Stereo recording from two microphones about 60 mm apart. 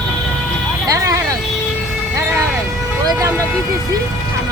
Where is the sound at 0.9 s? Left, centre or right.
Right.